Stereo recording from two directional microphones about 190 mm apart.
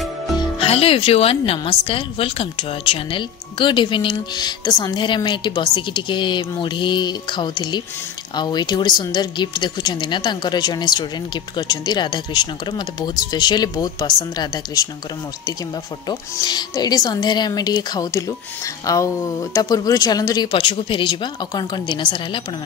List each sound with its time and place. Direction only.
0.6 s a woman's voice: 30° left (ahead or behind)
16.1 s a woman's voice: 20° left (ahead or behind)